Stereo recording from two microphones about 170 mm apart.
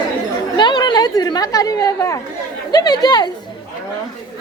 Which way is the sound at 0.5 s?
25° left (ahead or behind).